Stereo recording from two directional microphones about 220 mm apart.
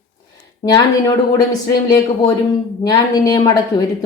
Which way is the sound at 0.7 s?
15° left (ahead or behind).